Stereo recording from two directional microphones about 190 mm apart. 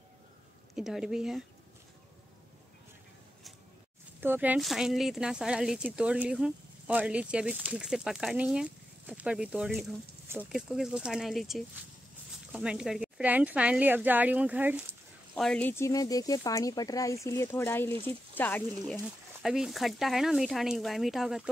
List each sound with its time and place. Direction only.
0.7 s speech: centre (ahead or behind)
4.2 s speech: 10° right (ahead or behind)
15.3 s speech: 5° left (ahead or behind)
19.4 s speech: centre (ahead or behind)